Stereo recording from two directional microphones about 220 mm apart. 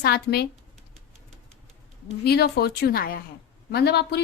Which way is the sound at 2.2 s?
45° left (ahead or behind).